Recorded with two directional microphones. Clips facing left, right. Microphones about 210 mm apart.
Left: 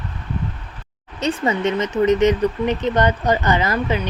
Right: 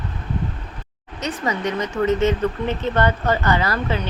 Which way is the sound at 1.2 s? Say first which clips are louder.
Left 4 dB; 30° left (ahead or behind).